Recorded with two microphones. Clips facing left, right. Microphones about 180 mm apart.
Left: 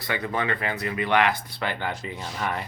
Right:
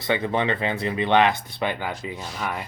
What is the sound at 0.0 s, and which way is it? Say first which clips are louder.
Speech: right 5 dB; 25° right (ahead or behind).